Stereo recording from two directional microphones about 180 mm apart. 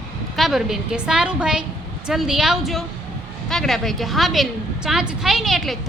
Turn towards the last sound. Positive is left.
turn(degrees=0)  # may be behind; listen again after turning